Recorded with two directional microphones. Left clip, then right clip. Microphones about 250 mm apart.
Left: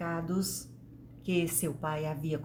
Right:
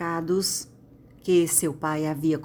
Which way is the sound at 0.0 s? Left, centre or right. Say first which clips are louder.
Right 9 dB; right.